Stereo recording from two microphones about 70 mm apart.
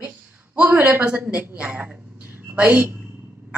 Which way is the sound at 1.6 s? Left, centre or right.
Right.